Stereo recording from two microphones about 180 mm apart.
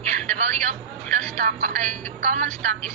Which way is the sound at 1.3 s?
45° right (ahead or behind).